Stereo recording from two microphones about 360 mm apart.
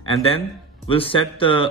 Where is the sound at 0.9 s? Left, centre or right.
Centre.